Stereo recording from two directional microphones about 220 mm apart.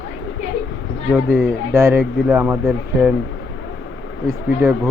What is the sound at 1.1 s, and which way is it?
Speech, 10° right (ahead or behind).